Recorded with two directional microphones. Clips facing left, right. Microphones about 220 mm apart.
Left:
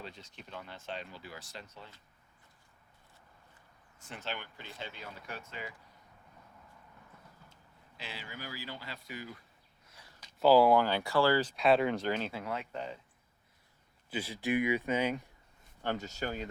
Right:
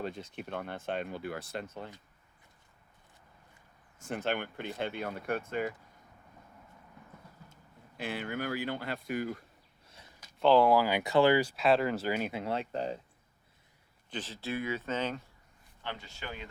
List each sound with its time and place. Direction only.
0.0 s speech: 55° right (ahead or behind)
4.0 s speech: 50° right (ahead or behind)
7.5 s speech: 55° right (ahead or behind)
9.8 s a sound: 25° right (ahead or behind)
10.4 s speech: 5° left (ahead or behind)
10.8 s speech: 15° right (ahead or behind)
12.3 s speech: 25° right (ahead or behind)
14.1 s speech: 10° left (ahead or behind)
15.8 s speech: 45° left (ahead or behind)